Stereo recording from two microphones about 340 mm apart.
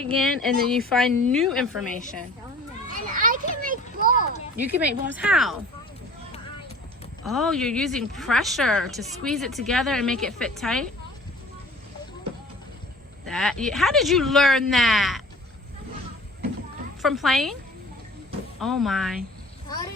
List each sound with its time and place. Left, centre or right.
0.0 s speech: centre
2.9 s children playing: right
4.5 s speech: centre
7.3 s speech: centre
13.2 s speech: centre
17.0 s speech: centre
18.6 s speech: centre
19.6 s a sound: centre